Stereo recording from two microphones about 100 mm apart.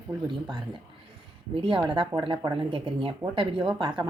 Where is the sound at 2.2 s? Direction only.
55° right (ahead or behind).